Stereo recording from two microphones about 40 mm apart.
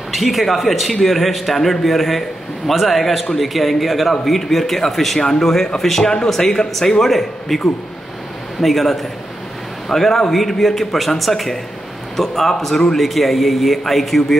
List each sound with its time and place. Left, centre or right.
0.1 s a man's voice: centre